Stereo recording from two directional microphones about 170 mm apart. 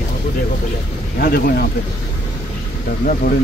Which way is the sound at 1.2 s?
65° left (ahead or behind).